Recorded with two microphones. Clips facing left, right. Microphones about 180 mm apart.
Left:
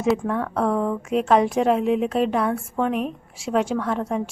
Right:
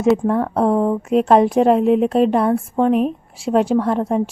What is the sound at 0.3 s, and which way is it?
A woman's voice, 35° right (ahead or behind).